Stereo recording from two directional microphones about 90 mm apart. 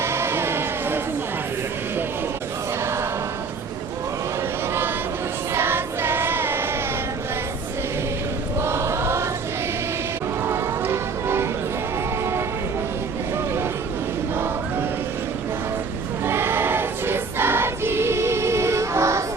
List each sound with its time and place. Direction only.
0.0 s music: 30° right (ahead or behind)
5.5 s music: 25° right (ahead or behind)
8.6 s chant: 30° right (ahead or behind)
10.4 s music: 25° right (ahead or behind)
14.3 s choir: 25° right (ahead or behind)
16.2 s choir: 25° right (ahead or behind)